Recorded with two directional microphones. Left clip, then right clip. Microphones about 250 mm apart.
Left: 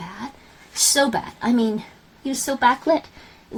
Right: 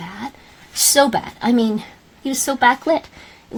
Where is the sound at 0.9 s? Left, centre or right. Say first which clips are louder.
Right 7 dB; right.